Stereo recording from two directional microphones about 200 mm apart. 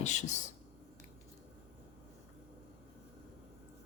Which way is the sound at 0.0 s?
35° left (ahead or behind).